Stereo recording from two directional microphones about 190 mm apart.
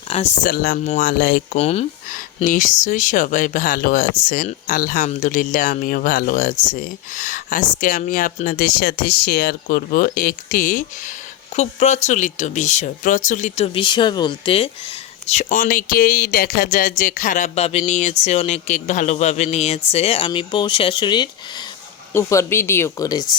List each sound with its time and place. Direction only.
0.1 s speech: 30° left (ahead or behind)
0.4 s speech: 50° left (ahead or behind)
1.5 s speech: 35° left (ahead or behind)
2.0 s speech: 45° left (ahead or behind); by 23.3 s 20° left (ahead or behind)